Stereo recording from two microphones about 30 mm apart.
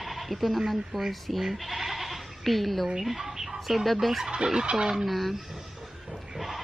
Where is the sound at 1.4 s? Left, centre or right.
Centre.